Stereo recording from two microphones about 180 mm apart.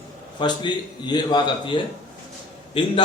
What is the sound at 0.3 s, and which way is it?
A man's voice, 25° left (ahead or behind).